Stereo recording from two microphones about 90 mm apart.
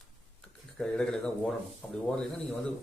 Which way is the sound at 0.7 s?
10° left (ahead or behind).